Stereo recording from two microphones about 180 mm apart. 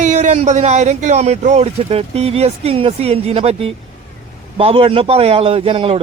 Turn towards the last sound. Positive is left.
turn(degrees=-30)  # may be behind; listen again after turning